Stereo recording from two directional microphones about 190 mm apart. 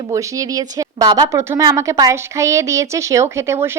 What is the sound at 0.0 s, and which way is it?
A woman's voice, 15° right (ahead or behind).